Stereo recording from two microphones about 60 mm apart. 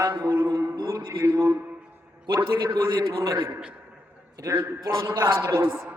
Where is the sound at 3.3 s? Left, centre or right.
Right.